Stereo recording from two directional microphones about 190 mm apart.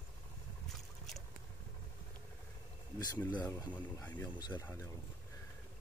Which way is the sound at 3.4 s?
10° left (ahead or behind).